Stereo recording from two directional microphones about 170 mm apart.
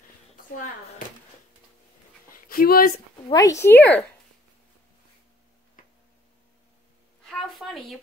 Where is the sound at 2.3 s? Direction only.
60° left (ahead or behind).